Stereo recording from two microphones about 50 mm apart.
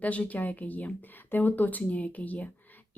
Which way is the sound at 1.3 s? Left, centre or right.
Left.